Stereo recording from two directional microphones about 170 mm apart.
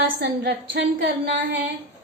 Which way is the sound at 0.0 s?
90° right.